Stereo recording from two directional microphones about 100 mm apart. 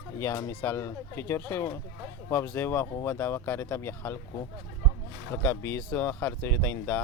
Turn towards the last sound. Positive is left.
turn(degrees=20)  # may be behind; listen again after turning